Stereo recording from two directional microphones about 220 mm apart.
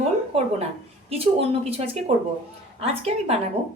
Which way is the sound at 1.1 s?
25° right (ahead or behind).